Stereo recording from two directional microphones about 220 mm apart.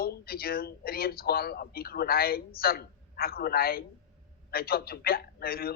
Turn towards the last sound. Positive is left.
turn(degrees=45)  # may be behind; listen again after turning